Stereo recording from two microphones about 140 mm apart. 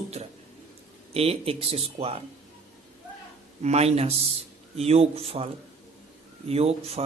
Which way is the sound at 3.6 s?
50° right (ahead or behind).